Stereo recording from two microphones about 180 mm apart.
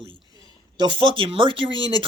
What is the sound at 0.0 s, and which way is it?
Speech, 25° right (ahead or behind).